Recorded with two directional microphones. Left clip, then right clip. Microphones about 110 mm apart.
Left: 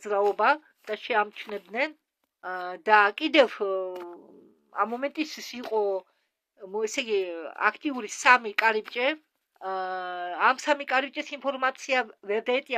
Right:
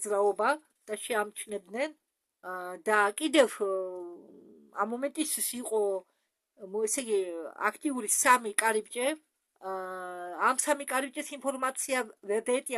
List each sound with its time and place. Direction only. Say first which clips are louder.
0.0 s speech: left 4 dB; 25° right (ahead or behind)
4.7 s speech: left 4 dB; 20° right (ahead or behind)